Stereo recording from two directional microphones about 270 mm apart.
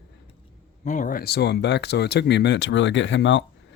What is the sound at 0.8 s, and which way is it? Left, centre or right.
Speech, left.